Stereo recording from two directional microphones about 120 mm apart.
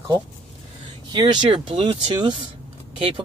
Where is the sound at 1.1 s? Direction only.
40° right (ahead or behind).